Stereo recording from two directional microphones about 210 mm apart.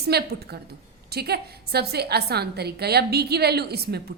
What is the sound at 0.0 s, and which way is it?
A woman's voice, 50° right (ahead or behind).